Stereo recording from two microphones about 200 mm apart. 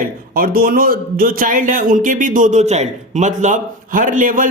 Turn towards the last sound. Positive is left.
turn(degrees=-45)  # may be behind; listen again after turning